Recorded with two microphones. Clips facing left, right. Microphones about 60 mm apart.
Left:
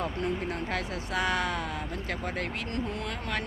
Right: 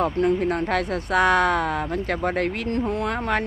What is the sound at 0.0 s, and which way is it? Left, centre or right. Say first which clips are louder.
Speech: right 10 dB; right.